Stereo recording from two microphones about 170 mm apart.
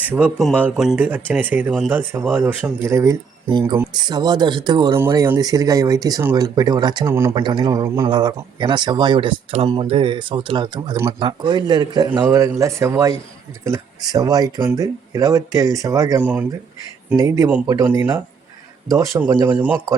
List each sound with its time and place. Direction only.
0.0 s speech: 10° right (ahead or behind)
7.3 s speech: 25° right (ahead or behind)
16.2 s speech: 10° right (ahead or behind)
17.2 s speech: 20° right (ahead or behind)
18.9 s speech: 20° right (ahead or behind)